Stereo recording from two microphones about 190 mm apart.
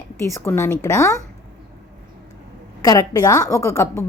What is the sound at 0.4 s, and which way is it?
Speech, 15° left (ahead or behind).